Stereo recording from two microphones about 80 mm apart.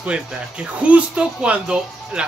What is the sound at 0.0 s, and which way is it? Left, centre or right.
Speech, centre.